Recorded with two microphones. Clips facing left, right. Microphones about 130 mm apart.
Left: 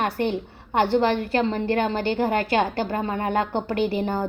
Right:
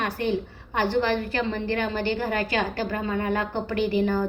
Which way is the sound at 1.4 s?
30° left (ahead or behind).